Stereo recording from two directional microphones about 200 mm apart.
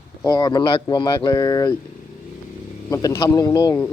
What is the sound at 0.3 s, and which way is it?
Speech, 20° left (ahead or behind).